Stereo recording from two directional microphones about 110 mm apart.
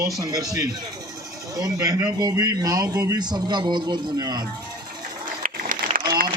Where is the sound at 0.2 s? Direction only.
35° right (ahead or behind).